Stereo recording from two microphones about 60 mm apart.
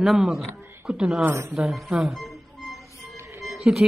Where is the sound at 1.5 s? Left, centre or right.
Centre.